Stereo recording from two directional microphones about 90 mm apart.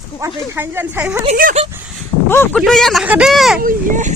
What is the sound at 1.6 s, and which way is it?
Speech, 90° right.